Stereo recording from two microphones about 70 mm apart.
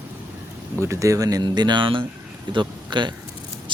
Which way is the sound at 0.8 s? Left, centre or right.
Right.